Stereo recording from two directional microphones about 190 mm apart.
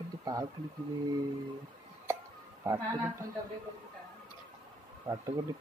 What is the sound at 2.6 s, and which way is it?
Speech, 15° right (ahead or behind).